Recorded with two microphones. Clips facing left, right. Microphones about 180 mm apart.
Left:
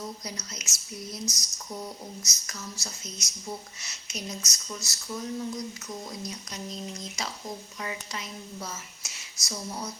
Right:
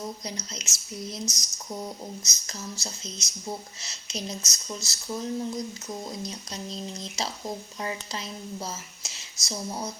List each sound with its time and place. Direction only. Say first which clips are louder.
0.3 s speech: right 3 dB; 25° right (ahead or behind)